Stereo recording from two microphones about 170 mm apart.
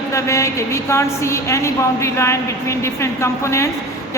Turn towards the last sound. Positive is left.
turn(degrees=15)  # may be behind; listen again after turning